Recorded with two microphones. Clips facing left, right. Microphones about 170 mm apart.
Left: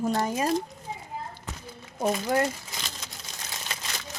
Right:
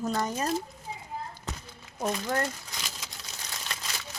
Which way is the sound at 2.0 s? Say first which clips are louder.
Left 4 dB; 10° left (ahead or behind).